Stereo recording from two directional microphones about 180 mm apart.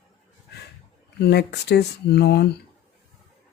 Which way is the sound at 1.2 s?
65° left (ahead or behind).